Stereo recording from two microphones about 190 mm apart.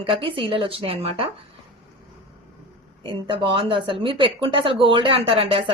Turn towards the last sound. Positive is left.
turn(degrees=-25)  # may be behind; listen again after turning